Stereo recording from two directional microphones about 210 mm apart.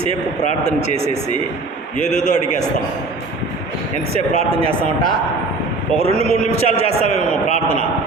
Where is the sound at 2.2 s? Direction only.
35° left (ahead or behind).